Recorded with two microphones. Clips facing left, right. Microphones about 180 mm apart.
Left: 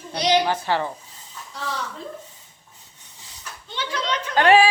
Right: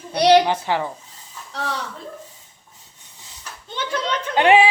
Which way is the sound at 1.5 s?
70° right (ahead or behind).